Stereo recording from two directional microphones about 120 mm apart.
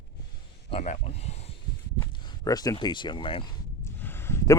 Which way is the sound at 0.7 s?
60° left (ahead or behind).